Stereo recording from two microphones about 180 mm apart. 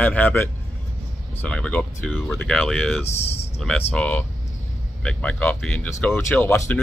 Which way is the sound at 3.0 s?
35° left (ahead or behind).